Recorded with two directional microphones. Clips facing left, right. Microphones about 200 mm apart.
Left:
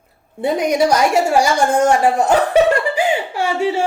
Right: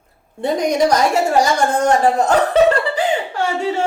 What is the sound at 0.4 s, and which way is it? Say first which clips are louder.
A woman's voice: even; 10° left (ahead or behind).